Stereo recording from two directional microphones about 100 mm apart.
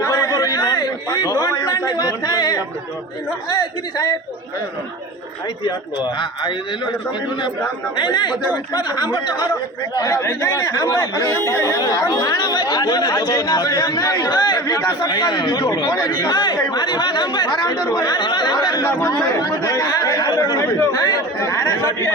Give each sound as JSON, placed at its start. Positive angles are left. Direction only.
{"t": 0.0, "sound": "a man's voice", "side_deg": 30}
{"t": 7.9, "sound": "speech", "side_deg": 50}
{"t": 19.0, "sound": "chatter", "side_deg": 35}
{"t": 20.7, "sound": "speech", "side_deg": 25}
{"t": 21.4, "sound": "chatter", "side_deg": 30}